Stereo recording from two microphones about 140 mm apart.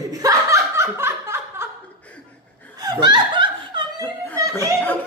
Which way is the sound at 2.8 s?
30° right (ahead or behind).